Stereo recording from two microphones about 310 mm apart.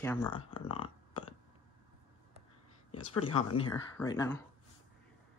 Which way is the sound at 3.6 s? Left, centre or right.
Centre.